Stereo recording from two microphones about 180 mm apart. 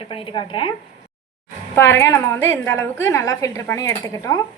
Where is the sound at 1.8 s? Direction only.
10° left (ahead or behind).